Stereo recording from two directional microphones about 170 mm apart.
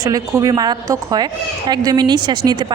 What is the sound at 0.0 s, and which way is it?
A woman's voice, 20° right (ahead or behind).